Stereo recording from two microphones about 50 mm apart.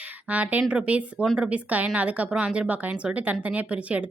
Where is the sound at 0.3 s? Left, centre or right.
Right.